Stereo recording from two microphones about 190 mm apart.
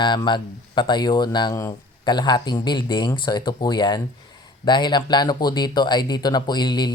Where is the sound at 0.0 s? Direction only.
25° left (ahead or behind).